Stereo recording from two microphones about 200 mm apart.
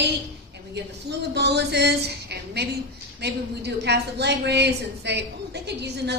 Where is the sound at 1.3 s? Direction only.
55° right (ahead or behind).